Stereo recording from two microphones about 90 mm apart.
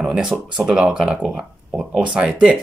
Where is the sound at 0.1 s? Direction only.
10° right (ahead or behind).